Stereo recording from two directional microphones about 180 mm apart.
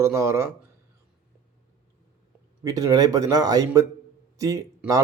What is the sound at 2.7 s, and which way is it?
A man's voice, 20° right (ahead or behind).